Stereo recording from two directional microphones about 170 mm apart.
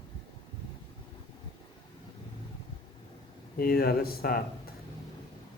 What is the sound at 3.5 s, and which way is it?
Speech, 60° left (ahead or behind).